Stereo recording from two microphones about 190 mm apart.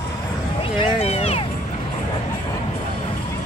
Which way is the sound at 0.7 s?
30° left (ahead or behind).